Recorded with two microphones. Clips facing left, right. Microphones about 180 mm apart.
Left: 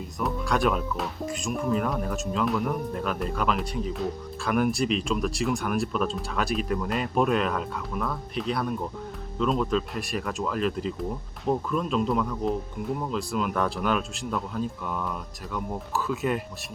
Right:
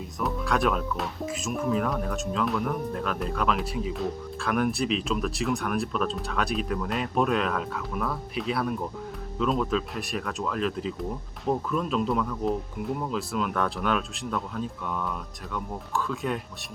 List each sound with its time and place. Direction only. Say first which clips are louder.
0.2 s speech: left 1 dB; centre (ahead or behind)